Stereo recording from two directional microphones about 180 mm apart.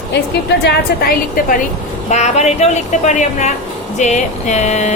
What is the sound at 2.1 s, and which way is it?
A woman's voice, 40° left (ahead or behind).